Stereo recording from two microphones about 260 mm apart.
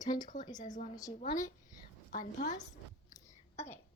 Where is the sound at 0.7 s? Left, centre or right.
Left.